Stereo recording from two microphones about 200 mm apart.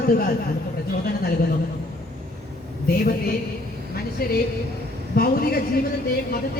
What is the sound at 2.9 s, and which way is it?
Speech, 45° left (ahead or behind).